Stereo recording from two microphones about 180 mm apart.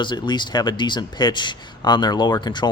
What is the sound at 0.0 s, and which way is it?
Speech, 25° left (ahead or behind).